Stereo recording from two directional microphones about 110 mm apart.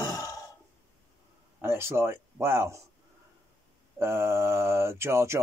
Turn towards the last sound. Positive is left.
turn(degrees=-25)  # may be behind; listen again after turning